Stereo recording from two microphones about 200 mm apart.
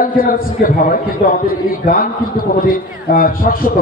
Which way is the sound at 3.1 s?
45° left (ahead or behind).